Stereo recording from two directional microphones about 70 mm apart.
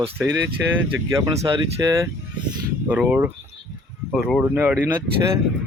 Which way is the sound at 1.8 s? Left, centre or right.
Right.